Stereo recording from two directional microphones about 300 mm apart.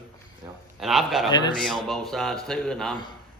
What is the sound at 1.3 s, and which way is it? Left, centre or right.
Speech, centre.